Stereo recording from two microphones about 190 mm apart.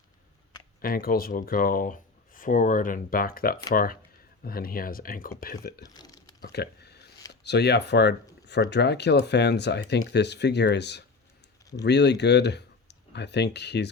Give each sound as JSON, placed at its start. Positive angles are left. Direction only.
{"t": 0.8, "sound": "speech", "side_deg": 50}
{"t": 5.8, "sound": "speech", "side_deg": 20}
{"t": 6.4, "sound": "a sound", "side_deg": 60}
{"t": 7.4, "sound": "speech", "side_deg": 60}